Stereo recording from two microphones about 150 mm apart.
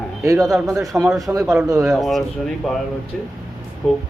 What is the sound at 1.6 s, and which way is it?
Speech, 25° right (ahead or behind).